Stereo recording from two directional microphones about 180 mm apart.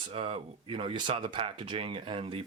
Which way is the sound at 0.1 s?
35° right (ahead or behind).